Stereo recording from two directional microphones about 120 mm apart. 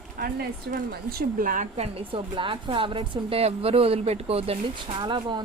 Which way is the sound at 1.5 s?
90° right.